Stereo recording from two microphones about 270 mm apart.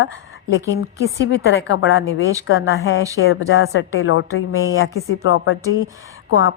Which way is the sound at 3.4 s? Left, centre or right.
Left.